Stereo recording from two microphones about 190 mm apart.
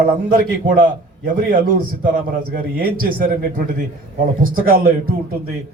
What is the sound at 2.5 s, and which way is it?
A man's voice, 50° right (ahead or behind).